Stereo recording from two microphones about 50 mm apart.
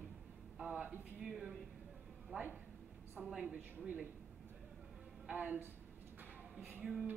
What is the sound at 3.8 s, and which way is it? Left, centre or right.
Speech, right.